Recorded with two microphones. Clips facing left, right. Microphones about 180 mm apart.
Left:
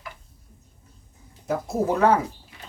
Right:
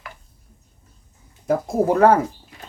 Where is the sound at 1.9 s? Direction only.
55° right (ahead or behind).